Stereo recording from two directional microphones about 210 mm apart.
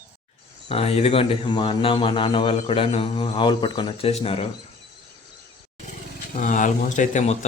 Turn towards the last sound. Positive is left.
turn(degrees=35)  # may be behind; listen again after turning